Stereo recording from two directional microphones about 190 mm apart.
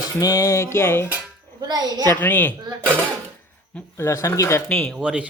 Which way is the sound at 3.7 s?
15° left (ahead or behind).